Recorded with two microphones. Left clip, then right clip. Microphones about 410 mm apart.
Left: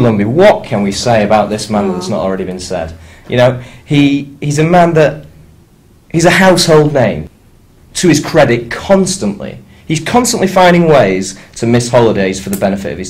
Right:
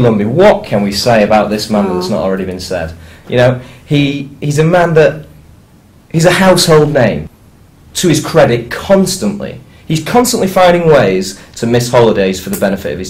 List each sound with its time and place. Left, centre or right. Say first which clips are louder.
0.2 s speech: left 3 dB; left
6.1 s speech: left 1 dB; left